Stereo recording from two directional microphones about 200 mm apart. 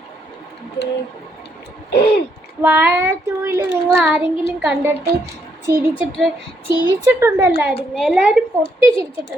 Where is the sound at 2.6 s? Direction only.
10° right (ahead or behind).